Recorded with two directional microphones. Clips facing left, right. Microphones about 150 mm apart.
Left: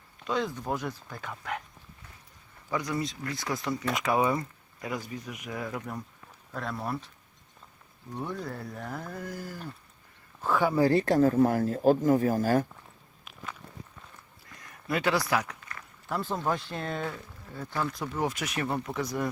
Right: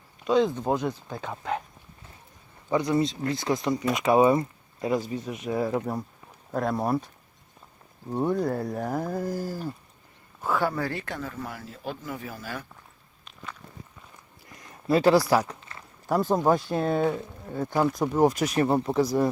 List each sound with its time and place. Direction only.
0.3 s speech: 20° right (ahead or behind)
2.6 s speech: 25° right (ahead or behind)
8.1 s speech: 45° right (ahead or behind)
10.4 s speech: centre (ahead or behind)
10.8 s speech: 35° left (ahead or behind)
13.2 s walk: 5° left (ahead or behind)
14.5 s a sound: 25° right (ahead or behind)
16.0 s speech: 40° right (ahead or behind)
17.8 s speech: 40° right (ahead or behind)